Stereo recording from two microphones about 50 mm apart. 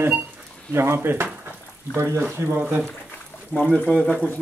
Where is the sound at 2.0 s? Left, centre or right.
Right.